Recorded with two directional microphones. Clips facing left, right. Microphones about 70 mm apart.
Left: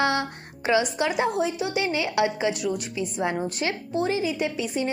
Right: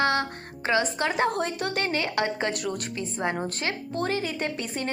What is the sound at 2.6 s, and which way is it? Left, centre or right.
Speech, right.